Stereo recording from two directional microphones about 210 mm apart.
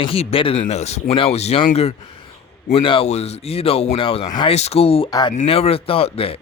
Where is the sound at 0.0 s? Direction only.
25° left (ahead or behind).